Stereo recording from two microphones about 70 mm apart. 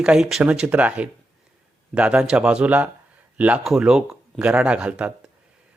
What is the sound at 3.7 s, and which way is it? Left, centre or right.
Speech, centre.